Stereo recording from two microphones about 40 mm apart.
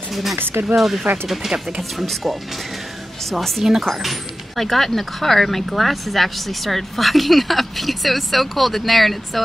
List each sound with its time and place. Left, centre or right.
0.1 s speech: centre
0.4 s speech: right
0.7 s speech: centre